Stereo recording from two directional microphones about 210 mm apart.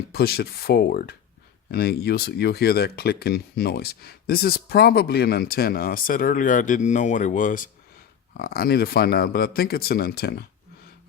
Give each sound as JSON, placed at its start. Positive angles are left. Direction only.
{"t": 0.1, "sound": "speech", "side_deg": 50}